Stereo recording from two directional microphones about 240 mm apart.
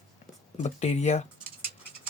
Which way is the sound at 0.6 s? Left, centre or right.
Left.